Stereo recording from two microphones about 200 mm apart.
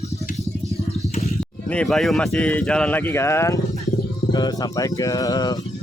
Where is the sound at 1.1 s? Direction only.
30° left (ahead or behind).